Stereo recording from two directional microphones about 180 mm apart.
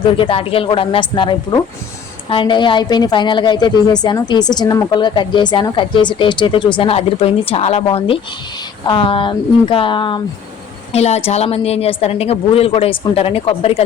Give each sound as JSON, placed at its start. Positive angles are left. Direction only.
{"t": 0.0, "sound": "a woman's voice", "side_deg": 30}